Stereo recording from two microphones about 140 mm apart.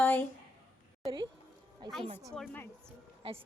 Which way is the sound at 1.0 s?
30° right (ahead or behind).